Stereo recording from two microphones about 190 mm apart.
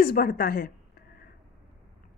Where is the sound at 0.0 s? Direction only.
50° left (ahead or behind).